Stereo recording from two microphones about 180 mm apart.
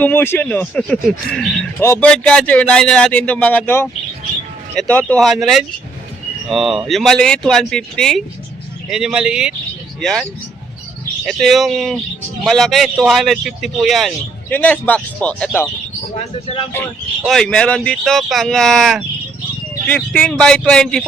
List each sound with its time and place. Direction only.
0.0 s speech: 10° left (ahead or behind)
1.8 s speech: 10° left (ahead or behind)
11.3 s speech: centre (ahead or behind)
16.1 s speech: 35° left (ahead or behind)
17.2 s speech: 5° left (ahead or behind)